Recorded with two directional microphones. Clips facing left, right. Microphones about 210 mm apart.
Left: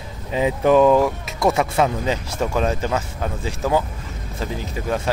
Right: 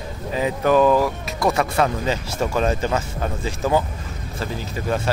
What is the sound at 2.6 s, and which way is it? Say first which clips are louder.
Speech: right 1 dB; 5° left (ahead or behind).